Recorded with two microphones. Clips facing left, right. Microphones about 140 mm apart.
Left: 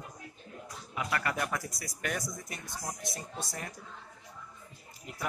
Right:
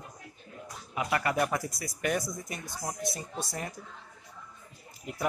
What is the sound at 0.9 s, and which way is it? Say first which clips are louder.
Speech: right 5 dB; 10° right (ahead or behind).